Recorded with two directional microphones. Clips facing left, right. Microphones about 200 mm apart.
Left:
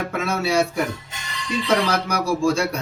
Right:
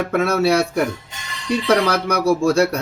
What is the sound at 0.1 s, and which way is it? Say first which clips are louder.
Speech: right 7 dB; 65° right (ahead or behind).